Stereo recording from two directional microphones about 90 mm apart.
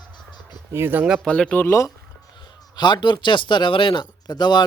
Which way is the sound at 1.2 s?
10° left (ahead or behind).